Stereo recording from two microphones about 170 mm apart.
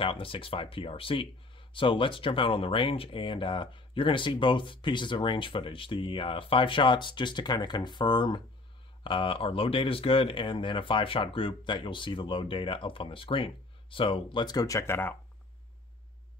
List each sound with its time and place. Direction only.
0.0 s speech: 30° left (ahead or behind); by 15.1 s 15° left (ahead or behind)